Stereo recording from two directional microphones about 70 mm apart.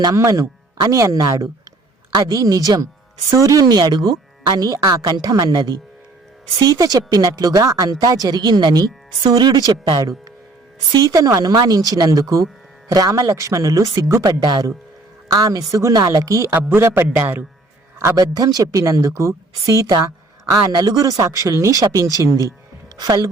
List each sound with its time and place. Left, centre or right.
0.1 s a woman's voice: right
10.0 s a woman's voice: right
14.4 s a man's voice: right
15.3 s a woman's voice: right
16.6 s a man's voice: right
18.2 s speech: right
19.6 s a woman's voice: right
21.2 s speech: right
23.0 s a woman's voice: right